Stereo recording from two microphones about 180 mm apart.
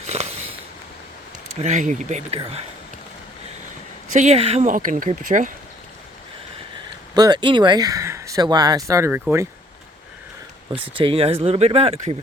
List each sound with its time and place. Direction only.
0.1 s a sound: 35° right (ahead or behind)
1.6 s speech: 40° right (ahead or behind)
4.1 s speech: 40° right (ahead or behind)
7.1 s speech: 25° right (ahead or behind)
10.8 s speech: 30° right (ahead or behind)